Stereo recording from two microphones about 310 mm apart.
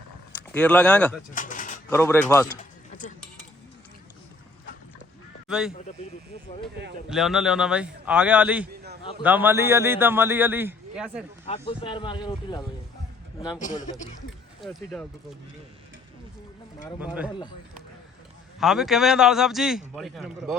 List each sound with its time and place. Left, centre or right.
0.5 s a man's voice: centre
1.3 s pigeon: left
1.9 s speech: centre
5.5 s speech: centre
7.1 s a man's voice: centre
8.7 s a sound: right
9.2 s a man's voice: centre
11.4 s speech: centre
13.6 s a man's voice: left
14.6 s a man's voice: centre
18.6 s a man's voice: centre